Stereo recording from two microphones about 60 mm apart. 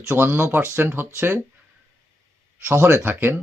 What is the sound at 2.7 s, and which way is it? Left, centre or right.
Speech, right.